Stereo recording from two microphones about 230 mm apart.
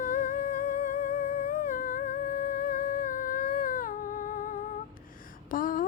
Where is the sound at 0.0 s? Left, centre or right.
Left.